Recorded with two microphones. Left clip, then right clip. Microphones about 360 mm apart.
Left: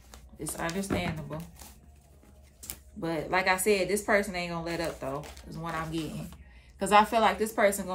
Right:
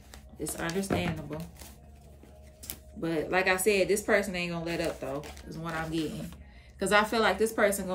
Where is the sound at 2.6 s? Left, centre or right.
Centre.